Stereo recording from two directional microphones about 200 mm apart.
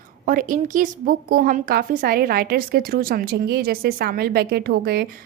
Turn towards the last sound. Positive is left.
turn(degrees=-50)  # may be behind; listen again after turning